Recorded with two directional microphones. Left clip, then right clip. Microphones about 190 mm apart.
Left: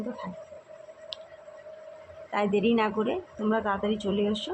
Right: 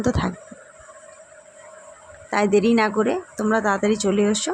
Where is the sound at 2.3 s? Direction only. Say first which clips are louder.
Right 7 dB; 40° right (ahead or behind).